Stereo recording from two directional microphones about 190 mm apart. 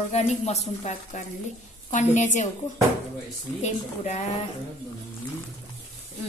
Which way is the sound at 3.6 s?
35° left (ahead or behind).